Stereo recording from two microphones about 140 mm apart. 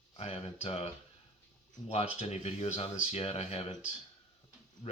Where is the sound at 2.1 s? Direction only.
45° left (ahead or behind).